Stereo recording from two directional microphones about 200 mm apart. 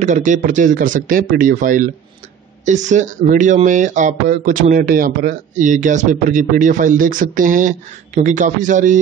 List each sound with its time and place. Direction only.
0.0 s speech: 40° right (ahead or behind)